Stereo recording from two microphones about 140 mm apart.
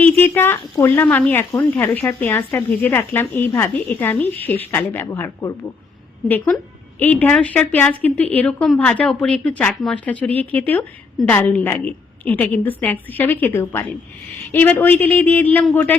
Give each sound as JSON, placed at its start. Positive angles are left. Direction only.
{"t": 0.0, "sound": "speech", "side_deg": 15}